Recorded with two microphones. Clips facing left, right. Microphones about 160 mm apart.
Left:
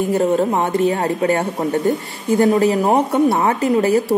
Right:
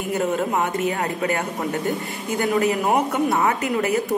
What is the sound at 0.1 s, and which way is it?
A woman's voice, 30° left (ahead or behind).